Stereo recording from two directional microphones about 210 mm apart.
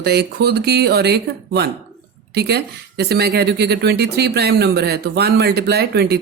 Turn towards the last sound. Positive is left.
turn(degrees=-50)  # may be behind; listen again after turning